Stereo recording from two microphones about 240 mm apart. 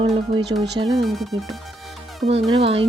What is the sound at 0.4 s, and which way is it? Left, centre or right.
Speech, right.